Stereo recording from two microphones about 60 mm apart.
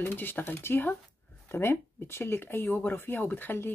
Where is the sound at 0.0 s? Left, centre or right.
Left.